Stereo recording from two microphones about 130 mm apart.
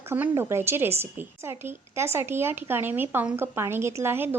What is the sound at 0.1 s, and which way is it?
A woman's voice, 20° right (ahead or behind).